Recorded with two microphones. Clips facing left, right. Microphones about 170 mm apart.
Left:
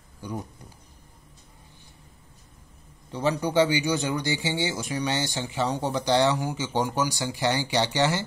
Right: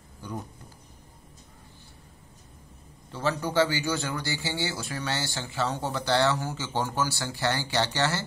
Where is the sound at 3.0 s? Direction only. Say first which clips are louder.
Left 3 dB; 15° left (ahead or behind).